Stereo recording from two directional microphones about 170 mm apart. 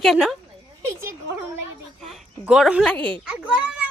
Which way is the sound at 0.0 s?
Centre (ahead or behind).